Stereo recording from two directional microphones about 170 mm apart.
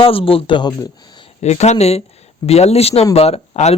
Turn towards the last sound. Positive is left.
turn(degrees=40)  # may be behind; listen again after turning